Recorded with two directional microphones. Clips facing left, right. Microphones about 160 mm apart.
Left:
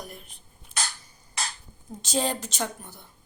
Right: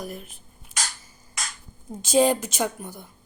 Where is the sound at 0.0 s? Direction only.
5° right (ahead or behind).